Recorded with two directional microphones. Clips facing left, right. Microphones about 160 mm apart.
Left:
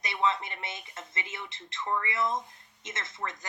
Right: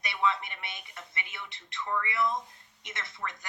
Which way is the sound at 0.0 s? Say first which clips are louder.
Left 1 dB; 20° left (ahead or behind).